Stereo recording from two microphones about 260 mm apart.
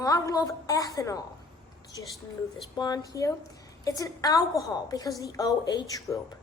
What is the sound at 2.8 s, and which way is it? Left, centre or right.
A woman's voice, centre.